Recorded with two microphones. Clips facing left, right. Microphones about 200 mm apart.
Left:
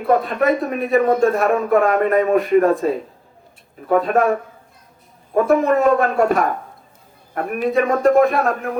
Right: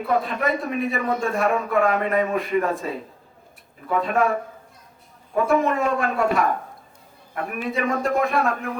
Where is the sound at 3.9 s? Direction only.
45° left (ahead or behind).